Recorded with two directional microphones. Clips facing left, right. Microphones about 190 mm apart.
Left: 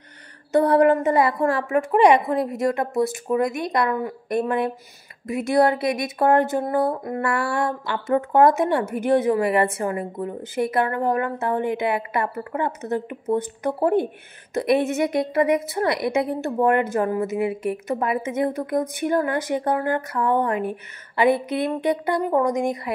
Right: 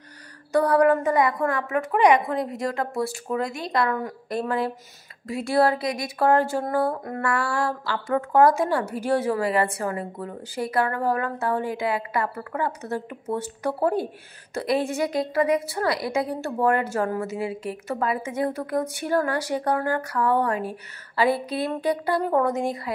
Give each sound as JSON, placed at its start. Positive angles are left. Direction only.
{"t": 0.5, "sound": "speech", "side_deg": 25}